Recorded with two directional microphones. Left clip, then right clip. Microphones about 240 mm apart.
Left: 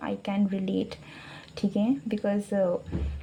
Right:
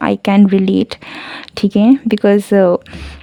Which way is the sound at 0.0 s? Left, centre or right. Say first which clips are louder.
Right 18 dB; right.